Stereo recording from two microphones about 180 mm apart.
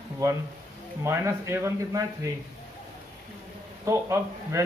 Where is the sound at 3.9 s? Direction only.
15° right (ahead or behind).